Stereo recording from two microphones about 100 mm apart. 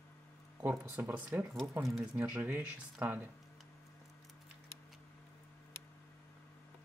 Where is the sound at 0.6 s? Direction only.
20° right (ahead or behind).